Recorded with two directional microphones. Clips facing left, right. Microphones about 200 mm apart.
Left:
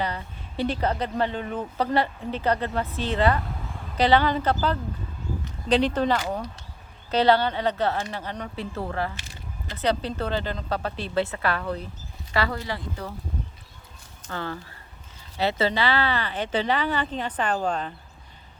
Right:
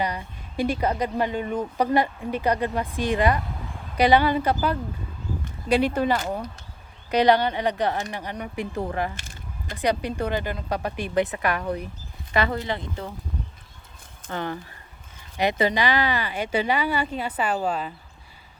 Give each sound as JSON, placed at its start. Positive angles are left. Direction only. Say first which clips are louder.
{"t": 0.0, "sound": "speech", "louder": "right 2 dB", "side_deg": -15}
{"t": 14.3, "sound": "speech", "louder": "right 3 dB", "side_deg": -20}